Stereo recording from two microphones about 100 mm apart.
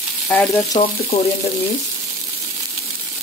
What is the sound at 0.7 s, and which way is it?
Frying, 80° left.